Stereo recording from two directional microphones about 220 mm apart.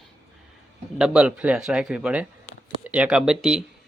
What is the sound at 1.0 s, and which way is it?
Speech, 5° right (ahead or behind).